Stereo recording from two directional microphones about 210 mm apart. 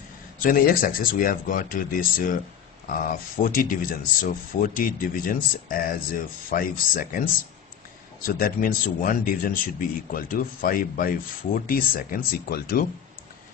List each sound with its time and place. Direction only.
0.4 s speech: 40° left (ahead or behind)
8.3 s speech: 45° left (ahead or behind)